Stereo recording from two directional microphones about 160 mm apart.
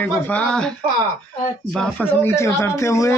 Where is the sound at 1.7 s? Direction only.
5° left (ahead or behind).